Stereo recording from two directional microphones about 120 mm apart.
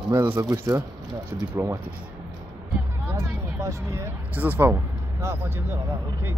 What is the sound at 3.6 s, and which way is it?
Speech, 25° right (ahead or behind).